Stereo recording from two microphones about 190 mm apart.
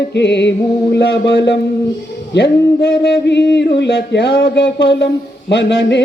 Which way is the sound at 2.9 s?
65° left (ahead or behind).